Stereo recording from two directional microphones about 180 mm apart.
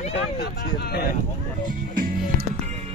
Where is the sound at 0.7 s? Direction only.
60° left (ahead or behind).